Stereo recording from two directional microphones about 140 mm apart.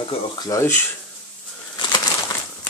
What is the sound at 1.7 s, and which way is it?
Bird, 30° left (ahead or behind).